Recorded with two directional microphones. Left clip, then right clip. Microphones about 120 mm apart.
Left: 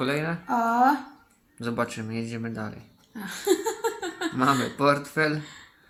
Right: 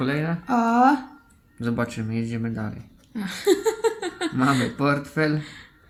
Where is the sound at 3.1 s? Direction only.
90° right.